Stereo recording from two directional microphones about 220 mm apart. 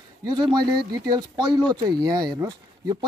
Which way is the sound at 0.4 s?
20° right (ahead or behind).